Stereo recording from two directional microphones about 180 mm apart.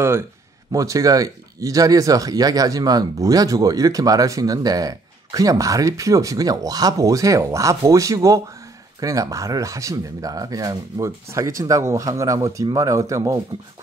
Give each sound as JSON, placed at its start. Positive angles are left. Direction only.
{"t": 0.7, "sound": "speech", "side_deg": -20}